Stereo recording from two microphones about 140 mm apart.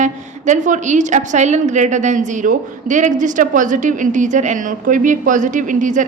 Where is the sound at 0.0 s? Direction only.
60° right (ahead or behind).